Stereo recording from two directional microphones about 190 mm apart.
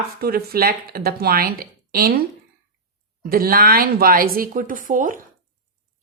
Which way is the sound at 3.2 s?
50° right (ahead or behind).